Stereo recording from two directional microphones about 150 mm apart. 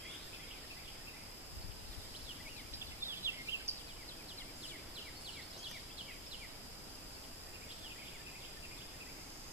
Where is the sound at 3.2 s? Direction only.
20° right (ahead or behind).